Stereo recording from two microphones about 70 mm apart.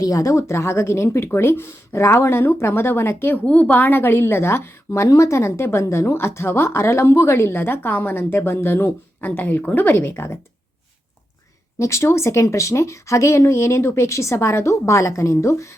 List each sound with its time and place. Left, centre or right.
0.0 s a woman's voice: left
3.4 s a woman's voice: left
11.8 s speech: left